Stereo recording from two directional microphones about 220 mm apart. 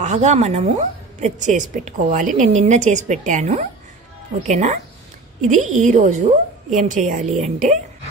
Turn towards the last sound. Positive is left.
turn(degrees=-35)  # may be behind; listen again after turning